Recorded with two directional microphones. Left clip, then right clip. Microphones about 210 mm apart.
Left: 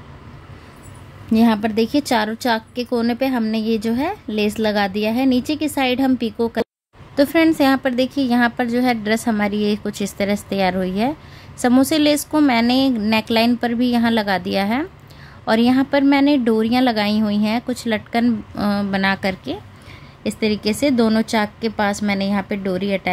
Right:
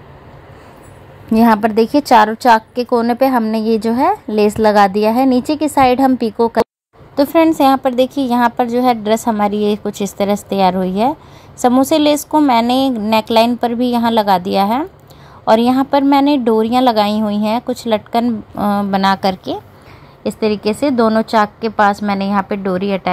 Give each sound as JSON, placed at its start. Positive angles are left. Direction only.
{"t": 1.3, "sound": "a woman's voice", "side_deg": -20}
{"t": 7.2, "sound": "a woman's voice", "side_deg": -5}
{"t": 20.3, "sound": "a woman's voice", "side_deg": 10}